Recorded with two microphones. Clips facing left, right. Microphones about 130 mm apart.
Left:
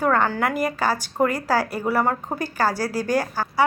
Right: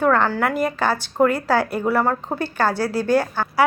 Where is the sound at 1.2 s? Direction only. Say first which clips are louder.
Right 3 dB; 60° right (ahead or behind).